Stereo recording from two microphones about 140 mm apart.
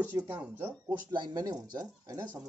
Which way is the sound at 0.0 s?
15° right (ahead or behind).